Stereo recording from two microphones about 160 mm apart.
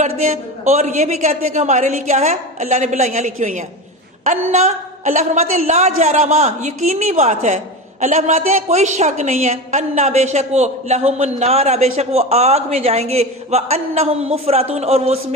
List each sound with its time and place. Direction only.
0.0 s a woman's voice: 45° right (ahead or behind)